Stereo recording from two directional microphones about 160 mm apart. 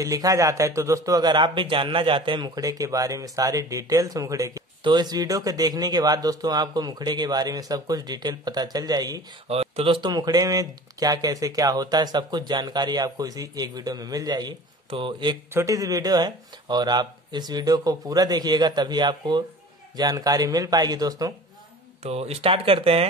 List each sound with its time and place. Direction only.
0.0 s speech: 20° right (ahead or behind)
9.5 s speech: 40° right (ahead or behind)
22.0 s speech: 40° right (ahead or behind)